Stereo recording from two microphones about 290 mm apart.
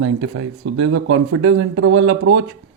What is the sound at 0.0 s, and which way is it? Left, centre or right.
A man's voice, right.